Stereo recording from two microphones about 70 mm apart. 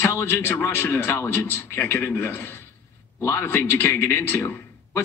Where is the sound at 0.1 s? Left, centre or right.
Left.